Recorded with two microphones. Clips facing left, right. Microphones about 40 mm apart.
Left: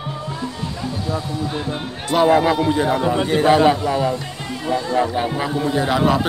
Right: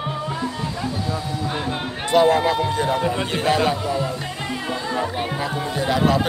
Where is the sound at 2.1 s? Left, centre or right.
Centre.